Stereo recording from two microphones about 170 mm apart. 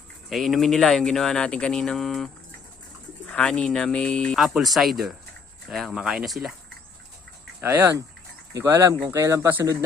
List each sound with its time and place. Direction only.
0.3 s speech: centre (ahead or behind)
7.6 s speech: 15° right (ahead or behind)